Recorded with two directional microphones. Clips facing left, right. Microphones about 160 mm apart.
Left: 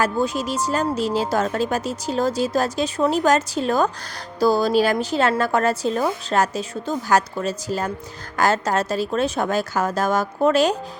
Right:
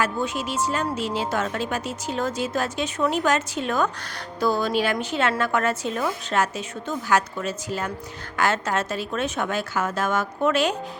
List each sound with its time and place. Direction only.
0.0 s speech: 40° left (ahead or behind)